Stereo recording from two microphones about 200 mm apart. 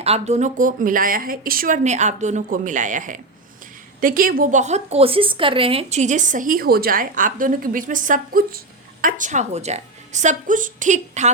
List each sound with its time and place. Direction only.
0.0 s speech: 30° right (ahead or behind)